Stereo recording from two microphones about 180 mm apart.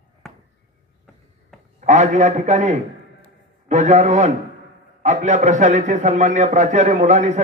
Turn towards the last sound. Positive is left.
turn(degrees=-40)  # may be behind; listen again after turning